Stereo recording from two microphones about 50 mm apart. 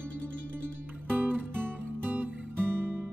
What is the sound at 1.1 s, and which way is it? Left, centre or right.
Music, right.